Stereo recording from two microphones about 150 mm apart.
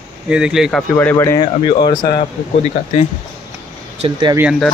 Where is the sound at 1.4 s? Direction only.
30° left (ahead or behind).